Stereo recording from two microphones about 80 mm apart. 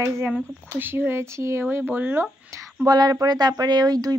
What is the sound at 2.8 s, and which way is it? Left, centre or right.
Speech, right.